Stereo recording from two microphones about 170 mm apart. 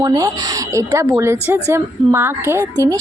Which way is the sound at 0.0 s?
20° right (ahead or behind).